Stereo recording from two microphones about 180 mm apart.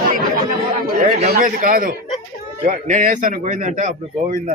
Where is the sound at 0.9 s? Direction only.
55° right (ahead or behind).